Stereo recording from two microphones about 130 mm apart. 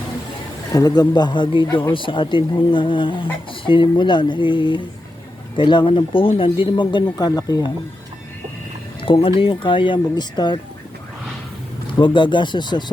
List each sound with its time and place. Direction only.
0.7 s speech: 30° left (ahead or behind)
9.0 s speech: 45° left (ahead or behind)
11.9 s speech: 35° left (ahead or behind)